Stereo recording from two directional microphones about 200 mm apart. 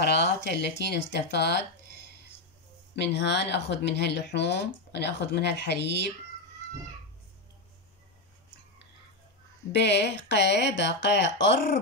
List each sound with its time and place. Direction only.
0.0 s speech: 55° left (ahead or behind)
3.0 s speech: 60° left (ahead or behind)
9.7 s speech: 60° left (ahead or behind)